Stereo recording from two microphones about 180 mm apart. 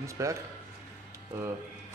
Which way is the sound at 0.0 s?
15° right (ahead or behind).